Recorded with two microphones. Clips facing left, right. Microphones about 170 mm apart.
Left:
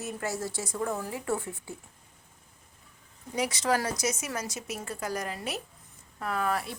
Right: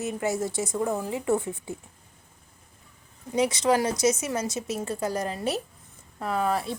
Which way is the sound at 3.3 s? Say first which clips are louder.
Right 5 dB; 20° right (ahead or behind).